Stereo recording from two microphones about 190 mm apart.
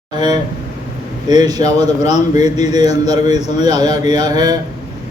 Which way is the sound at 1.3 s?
20° right (ahead or behind).